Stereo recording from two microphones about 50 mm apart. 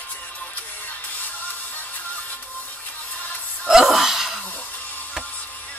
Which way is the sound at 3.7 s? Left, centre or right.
Centre.